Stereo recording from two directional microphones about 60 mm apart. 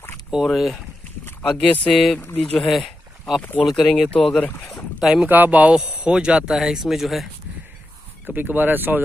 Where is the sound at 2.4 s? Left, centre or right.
Centre.